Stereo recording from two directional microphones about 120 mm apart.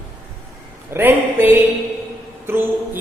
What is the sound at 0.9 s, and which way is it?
A man's voice, 20° right (ahead or behind).